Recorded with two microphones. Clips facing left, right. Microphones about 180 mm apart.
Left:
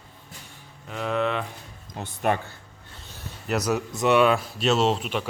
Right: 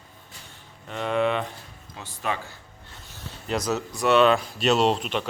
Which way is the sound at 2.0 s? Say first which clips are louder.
Left 5 dB; 55° left (ahead or behind).